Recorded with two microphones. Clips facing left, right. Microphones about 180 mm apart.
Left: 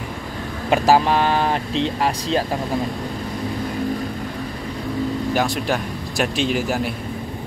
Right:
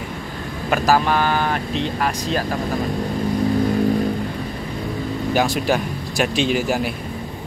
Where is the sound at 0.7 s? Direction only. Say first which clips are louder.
Left 2 dB; 25° left (ahead or behind).